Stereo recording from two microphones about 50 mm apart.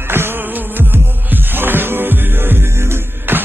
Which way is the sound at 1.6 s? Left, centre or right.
Right.